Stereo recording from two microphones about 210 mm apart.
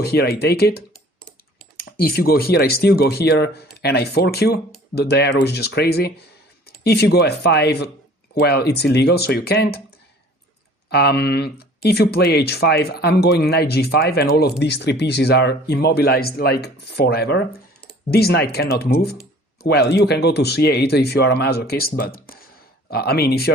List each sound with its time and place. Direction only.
0.0 s speech: 50° left (ahead or behind)
10.8 s speech: 50° left (ahead or behind)